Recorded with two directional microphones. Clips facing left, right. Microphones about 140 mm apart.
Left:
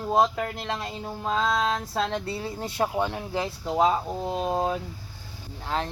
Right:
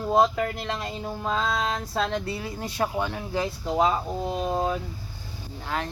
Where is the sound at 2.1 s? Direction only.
30° left (ahead or behind).